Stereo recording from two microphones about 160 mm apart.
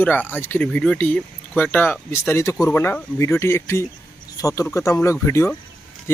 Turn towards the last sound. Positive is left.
turn(degrees=15)  # may be behind; listen again after turning